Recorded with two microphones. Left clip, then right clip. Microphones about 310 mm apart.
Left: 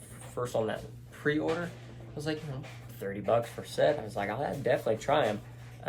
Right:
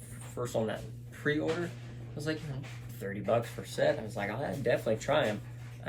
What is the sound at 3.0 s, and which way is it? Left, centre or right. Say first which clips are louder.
Speech: left 2 dB; centre.